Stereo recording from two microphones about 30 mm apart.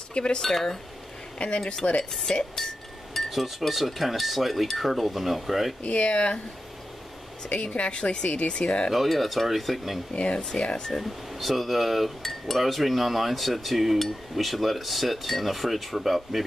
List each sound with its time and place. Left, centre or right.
0.1 s speech: left
0.4 s speech: centre
1.4 s speech: left
1.8 s speech: left
2.3 s speech: left
3.3 s cutlery: centre
5.9 s speech: left
7.4 s speech: left
9.1 s cutlery: centre
10.1 s speech: left
11.0 s cutlery: centre